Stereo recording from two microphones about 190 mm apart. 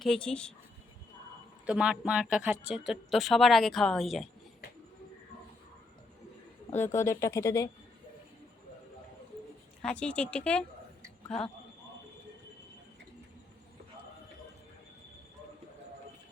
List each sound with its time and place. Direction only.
0.0 s speech: 5° left (ahead or behind)
1.6 s speech: 5° right (ahead or behind)
6.8 s speech: 15° left (ahead or behind)
9.8 s speech: 5° left (ahead or behind)